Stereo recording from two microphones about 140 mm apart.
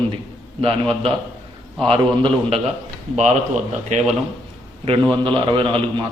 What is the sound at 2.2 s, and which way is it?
Speech, 45° right (ahead or behind).